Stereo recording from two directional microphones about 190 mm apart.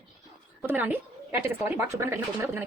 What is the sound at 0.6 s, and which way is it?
A woman's voice, 10° right (ahead or behind).